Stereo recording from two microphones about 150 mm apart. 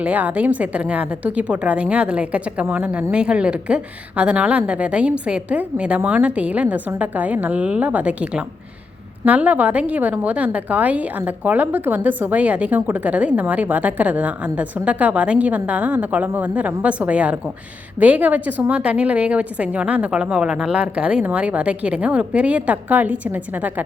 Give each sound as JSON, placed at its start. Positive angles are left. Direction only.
{"t": 0.0, "sound": "a woman's voice", "side_deg": -10}